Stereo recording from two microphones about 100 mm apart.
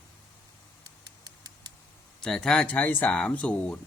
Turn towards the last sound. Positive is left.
turn(degrees=10)  # may be behind; listen again after turning